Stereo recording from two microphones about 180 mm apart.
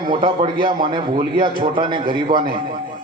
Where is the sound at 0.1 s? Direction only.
25° right (ahead or behind).